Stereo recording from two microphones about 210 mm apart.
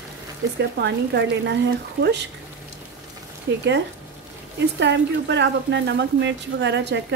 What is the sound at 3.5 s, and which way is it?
Speech, 50° right (ahead or behind).